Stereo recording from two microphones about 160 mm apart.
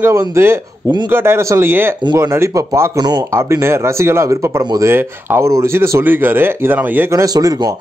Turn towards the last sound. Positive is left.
turn(degrees=-25)  # may be behind; listen again after turning